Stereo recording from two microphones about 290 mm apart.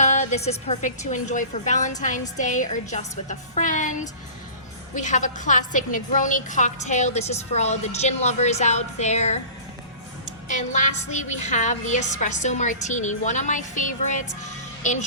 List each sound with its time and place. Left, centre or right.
0.0 s a woman's voice: left
10.5 s a woman's voice: left